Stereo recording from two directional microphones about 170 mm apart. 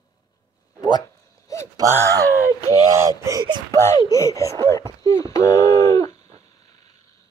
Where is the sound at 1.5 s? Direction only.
20° left (ahead or behind).